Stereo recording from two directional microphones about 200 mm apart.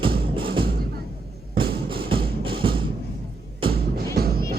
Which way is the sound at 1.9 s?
25° right (ahead or behind).